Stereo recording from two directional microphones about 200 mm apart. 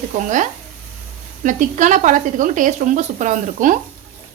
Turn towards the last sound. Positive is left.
turn(degrees=-40)  # may be behind; listen again after turning